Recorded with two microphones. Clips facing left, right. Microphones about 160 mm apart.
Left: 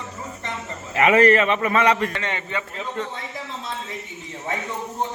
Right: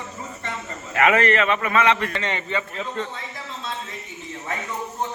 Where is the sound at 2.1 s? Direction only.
10° left (ahead or behind).